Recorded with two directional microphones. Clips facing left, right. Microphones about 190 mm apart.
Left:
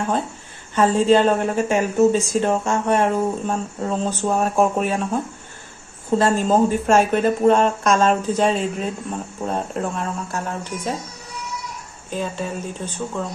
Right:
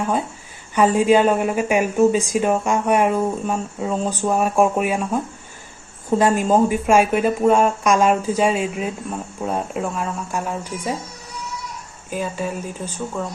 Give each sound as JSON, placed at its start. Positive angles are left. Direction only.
{"t": 0.8, "sound": "speech", "side_deg": -15}
{"t": 12.1, "sound": "speech", "side_deg": -10}